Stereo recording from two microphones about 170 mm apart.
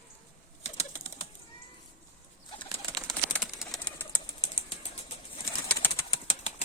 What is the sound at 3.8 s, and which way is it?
Bird, 10° left (ahead or behind).